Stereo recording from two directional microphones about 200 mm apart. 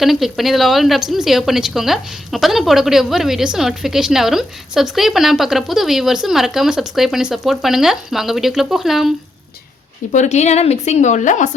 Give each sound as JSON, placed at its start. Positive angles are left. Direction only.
{"t": 0.0, "sound": "a woman's voice", "side_deg": 0}
{"t": 10.1, "sound": "speech", "side_deg": 35}